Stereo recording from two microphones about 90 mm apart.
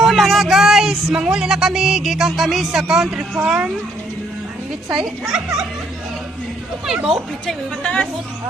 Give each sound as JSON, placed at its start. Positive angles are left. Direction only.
{"t": 0.0, "sound": "speech", "side_deg": 0}
{"t": 4.9, "sound": "speech", "side_deg": -5}
{"t": 6.8, "sound": "speech", "side_deg": -5}
{"t": 7.4, "sound": "a woman's voice", "side_deg": 10}